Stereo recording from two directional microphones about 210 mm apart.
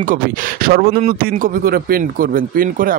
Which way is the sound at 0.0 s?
40° right (ahead or behind).